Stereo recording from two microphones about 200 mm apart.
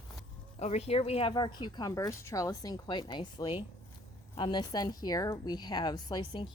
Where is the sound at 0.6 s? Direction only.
35° left (ahead or behind).